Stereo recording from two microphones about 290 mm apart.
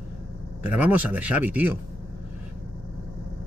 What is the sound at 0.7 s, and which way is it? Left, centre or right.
Speech, centre.